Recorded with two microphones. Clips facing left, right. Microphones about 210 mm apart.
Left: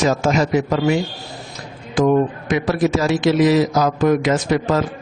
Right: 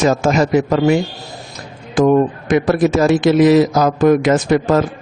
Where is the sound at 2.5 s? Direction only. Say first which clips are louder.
Right 5 dB; 50° right (ahead or behind).